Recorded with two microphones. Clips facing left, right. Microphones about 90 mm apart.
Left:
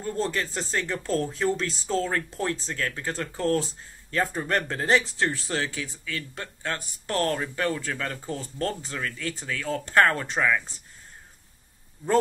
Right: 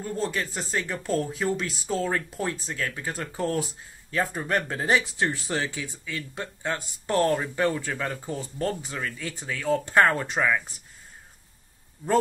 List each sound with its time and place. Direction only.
0.0 s speech: 5° right (ahead or behind)
4.1 s speech: centre (ahead or behind)